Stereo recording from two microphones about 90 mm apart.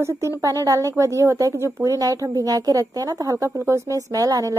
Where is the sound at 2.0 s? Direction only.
40° right (ahead or behind).